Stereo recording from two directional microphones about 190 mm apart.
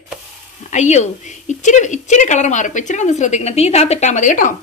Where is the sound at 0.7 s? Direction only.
40° left (ahead or behind).